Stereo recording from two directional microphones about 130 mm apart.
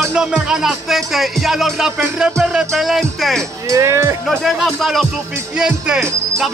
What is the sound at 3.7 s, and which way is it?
Speech, 25° right (ahead or behind).